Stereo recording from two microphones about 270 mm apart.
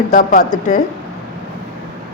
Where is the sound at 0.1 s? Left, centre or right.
Left.